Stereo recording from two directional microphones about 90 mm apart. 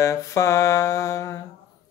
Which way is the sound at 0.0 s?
35° left (ahead or behind).